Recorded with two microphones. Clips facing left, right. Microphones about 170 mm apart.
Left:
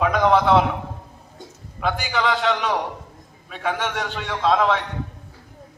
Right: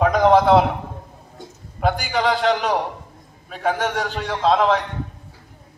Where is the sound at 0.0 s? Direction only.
35° right (ahead or behind).